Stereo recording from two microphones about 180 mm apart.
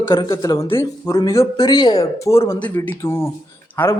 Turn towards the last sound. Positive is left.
turn(degrees=10)  # may be behind; listen again after turning